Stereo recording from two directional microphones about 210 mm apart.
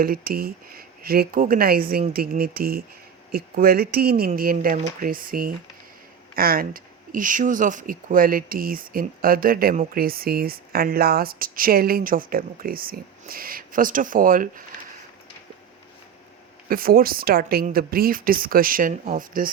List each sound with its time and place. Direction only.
0.0 s speech: 45° right (ahead or behind)
16.6 s speech: 45° right (ahead or behind)